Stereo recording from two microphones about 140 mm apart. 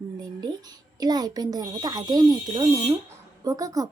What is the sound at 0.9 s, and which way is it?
A woman's voice, 30° right (ahead or behind).